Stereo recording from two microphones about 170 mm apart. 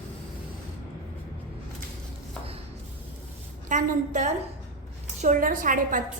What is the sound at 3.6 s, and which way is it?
A woman's voice, 45° right (ahead or behind).